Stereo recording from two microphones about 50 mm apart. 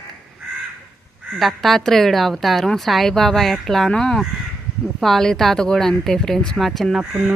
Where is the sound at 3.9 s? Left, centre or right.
Centre.